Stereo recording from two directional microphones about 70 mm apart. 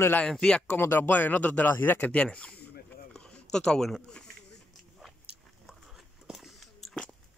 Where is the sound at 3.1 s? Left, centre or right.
Centre.